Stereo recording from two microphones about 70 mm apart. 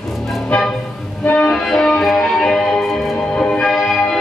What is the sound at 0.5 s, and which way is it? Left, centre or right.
Vehicle, centre.